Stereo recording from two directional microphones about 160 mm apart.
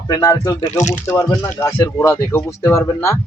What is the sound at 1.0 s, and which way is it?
Speech, 20° left (ahead or behind).